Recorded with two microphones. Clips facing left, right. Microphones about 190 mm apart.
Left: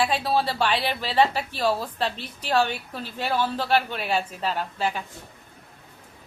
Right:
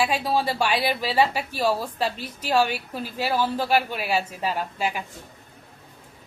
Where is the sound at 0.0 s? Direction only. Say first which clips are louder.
Even; 10° right (ahead or behind).